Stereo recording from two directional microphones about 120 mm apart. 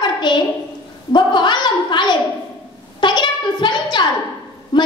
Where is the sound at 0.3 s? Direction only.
40° left (ahead or behind).